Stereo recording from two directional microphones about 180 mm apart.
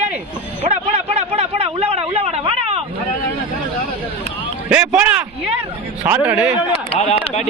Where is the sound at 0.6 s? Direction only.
35° right (ahead or behind).